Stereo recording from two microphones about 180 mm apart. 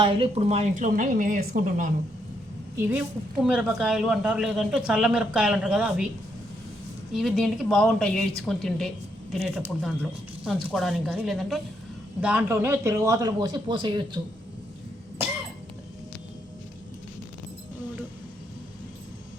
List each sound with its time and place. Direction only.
0.0 s a woman's voice: 30° right (ahead or behind); by 1.9 s 50° right (ahead or behind)
3.4 s a man's voice: 5° right (ahead or behind)
7.1 s a man's voice: centre (ahead or behind); by 14.2 s 25° right (ahead or behind)